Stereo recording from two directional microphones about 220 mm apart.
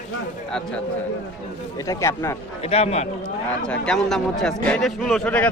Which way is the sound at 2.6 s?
25° left (ahead or behind).